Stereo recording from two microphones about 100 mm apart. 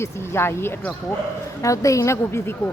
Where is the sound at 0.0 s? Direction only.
25° left (ahead or behind).